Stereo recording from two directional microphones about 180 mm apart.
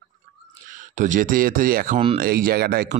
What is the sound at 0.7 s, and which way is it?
Speech, 45° right (ahead or behind).